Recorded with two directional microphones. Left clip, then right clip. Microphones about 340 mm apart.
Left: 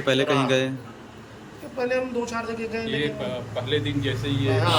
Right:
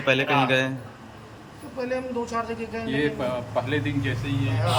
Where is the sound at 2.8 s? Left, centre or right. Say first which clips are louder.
Right 5 dB; centre.